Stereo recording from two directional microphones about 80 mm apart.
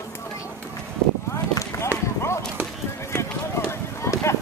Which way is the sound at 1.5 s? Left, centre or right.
Left.